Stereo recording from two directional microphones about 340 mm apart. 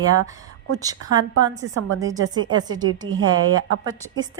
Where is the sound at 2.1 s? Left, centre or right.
Right.